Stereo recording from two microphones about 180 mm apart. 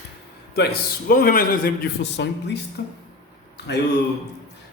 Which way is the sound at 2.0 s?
70° left (ahead or behind).